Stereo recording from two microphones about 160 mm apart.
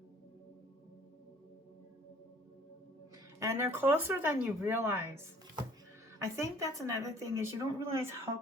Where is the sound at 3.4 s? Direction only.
15° right (ahead or behind).